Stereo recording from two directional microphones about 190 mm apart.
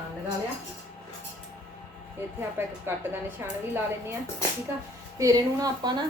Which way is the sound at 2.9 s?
15° right (ahead or behind).